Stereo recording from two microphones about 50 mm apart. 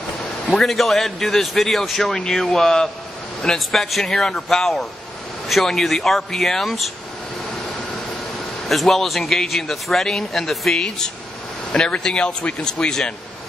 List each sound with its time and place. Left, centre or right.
0.5 s a man's voice: centre
8.6 s a man's voice: centre
11.7 s speech: centre